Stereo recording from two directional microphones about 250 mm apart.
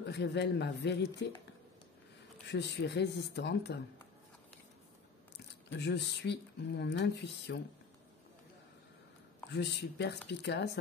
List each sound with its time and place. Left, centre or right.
0.0 s speech: left
2.4 s speech: left
5.7 s speech: left
9.5 s speech: left